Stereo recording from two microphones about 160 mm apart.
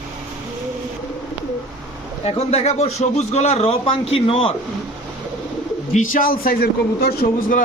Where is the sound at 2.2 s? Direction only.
40° left (ahead or behind).